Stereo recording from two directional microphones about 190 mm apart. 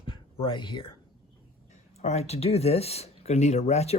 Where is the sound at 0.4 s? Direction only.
25° left (ahead or behind).